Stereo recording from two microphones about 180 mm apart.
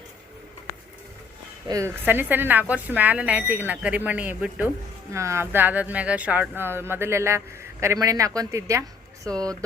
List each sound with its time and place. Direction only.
1.6 s speech: 20° right (ahead or behind)